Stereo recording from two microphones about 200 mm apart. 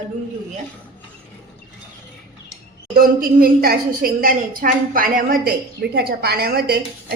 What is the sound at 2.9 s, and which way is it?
A woman's voice, 45° right (ahead or behind).